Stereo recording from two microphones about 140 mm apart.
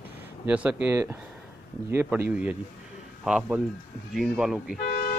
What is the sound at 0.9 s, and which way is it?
Speech, 20° right (ahead or behind).